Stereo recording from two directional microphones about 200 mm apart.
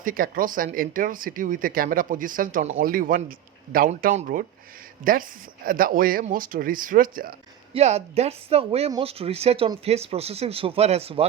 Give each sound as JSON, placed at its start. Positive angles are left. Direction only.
{"t": 0.0, "sound": "speech", "side_deg": -45}
{"t": 7.7, "sound": "speech", "side_deg": -30}